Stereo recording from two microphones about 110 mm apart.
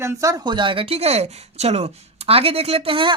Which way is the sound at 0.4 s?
45° right (ahead or behind).